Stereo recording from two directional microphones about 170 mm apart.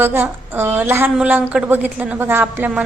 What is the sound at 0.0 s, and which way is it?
A woman's voice, 15° right (ahead or behind).